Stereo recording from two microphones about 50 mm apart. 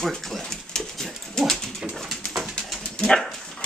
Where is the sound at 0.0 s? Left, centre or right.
Centre.